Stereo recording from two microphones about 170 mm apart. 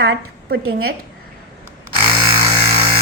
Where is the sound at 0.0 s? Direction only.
65° right (ahead or behind).